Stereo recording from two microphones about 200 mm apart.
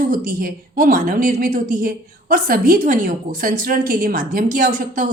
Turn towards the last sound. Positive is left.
turn(degrees=-40)  # may be behind; listen again after turning